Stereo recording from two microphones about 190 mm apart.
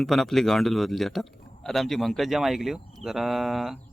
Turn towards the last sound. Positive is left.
turn(degrees=0)  # may be behind; listen again after turning